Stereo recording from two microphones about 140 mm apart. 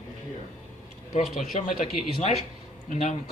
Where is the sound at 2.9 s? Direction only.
60° left (ahead or behind).